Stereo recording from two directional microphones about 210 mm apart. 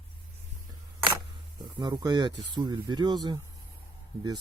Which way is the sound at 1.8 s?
20° right (ahead or behind).